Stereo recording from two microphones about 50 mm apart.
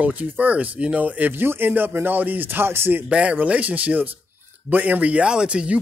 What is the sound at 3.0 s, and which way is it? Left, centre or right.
Speech, right.